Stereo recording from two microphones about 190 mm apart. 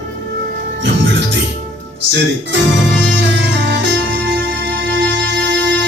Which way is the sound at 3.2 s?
75° right (ahead or behind).